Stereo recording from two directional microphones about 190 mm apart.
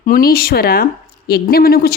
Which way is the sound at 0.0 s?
50° left (ahead or behind).